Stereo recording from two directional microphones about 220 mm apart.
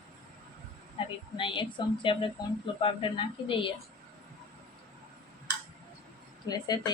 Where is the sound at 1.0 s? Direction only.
25° left (ahead or behind).